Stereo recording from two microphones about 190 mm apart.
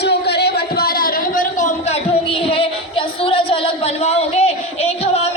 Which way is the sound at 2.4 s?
30° left (ahead or behind).